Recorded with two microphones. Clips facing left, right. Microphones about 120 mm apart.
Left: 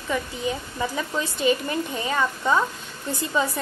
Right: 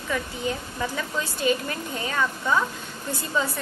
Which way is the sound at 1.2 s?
25° left (ahead or behind).